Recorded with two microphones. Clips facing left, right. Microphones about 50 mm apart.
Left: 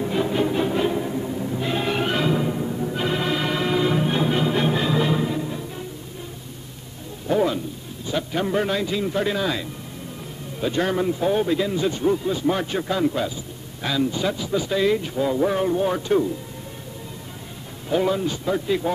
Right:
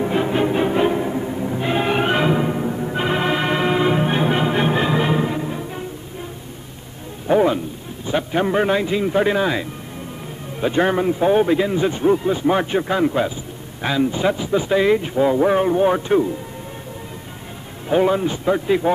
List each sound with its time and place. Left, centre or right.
0.0 s music: right
7.2 s a sound: right
8.1 s a man's voice: right
17.8 s a man's voice: right